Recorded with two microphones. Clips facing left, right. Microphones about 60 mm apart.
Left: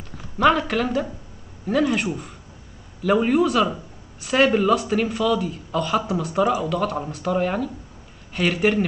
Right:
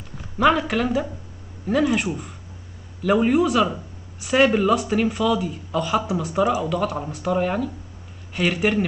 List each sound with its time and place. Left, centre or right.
0.4 s speech: centre